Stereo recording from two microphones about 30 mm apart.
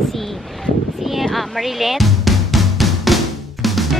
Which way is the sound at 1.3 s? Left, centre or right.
Centre.